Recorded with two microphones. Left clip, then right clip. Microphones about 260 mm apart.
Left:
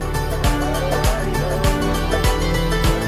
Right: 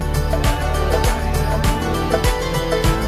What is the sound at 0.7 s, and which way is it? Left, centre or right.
Music, centre.